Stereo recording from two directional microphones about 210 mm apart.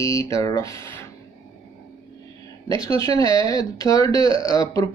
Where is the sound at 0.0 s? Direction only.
15° left (ahead or behind).